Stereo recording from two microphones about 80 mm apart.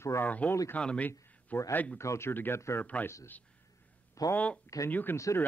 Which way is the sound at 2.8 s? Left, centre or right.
Centre.